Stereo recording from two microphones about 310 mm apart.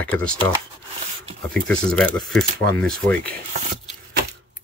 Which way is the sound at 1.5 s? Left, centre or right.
Centre.